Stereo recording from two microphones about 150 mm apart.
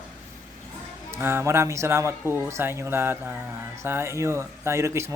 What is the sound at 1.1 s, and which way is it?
A man's voice, 15° right (ahead or behind).